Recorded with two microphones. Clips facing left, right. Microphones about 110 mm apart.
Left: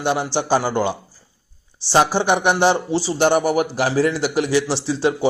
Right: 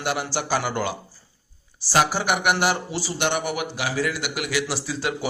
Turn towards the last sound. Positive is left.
turn(degrees=30)  # may be behind; listen again after turning